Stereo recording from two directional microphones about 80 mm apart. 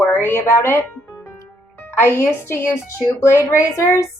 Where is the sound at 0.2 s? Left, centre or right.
Right.